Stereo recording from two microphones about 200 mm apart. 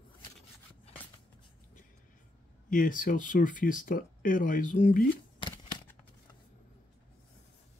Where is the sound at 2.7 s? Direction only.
40° left (ahead or behind).